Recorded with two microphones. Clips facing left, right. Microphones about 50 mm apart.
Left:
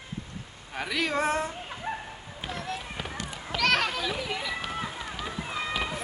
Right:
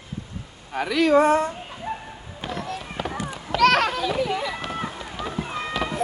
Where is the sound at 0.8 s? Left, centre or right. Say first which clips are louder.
Right 10 dB; centre.